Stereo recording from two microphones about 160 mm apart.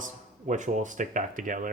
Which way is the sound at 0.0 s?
50° right (ahead or behind).